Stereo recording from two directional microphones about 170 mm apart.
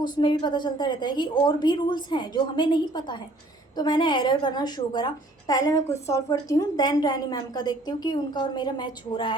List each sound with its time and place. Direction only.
0.0 s a woman's voice: 25° left (ahead or behind)